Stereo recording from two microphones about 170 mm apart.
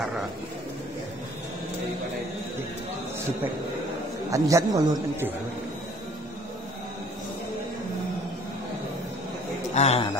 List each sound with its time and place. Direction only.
4.3 s a man's voice: 20° right (ahead or behind)
9.8 s a man's voice: 40° left (ahead or behind)